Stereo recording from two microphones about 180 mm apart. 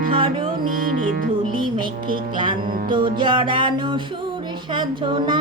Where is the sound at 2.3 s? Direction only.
25° right (ahead or behind).